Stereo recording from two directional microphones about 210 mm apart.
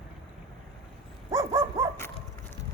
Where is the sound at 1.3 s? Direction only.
15° right (ahead or behind).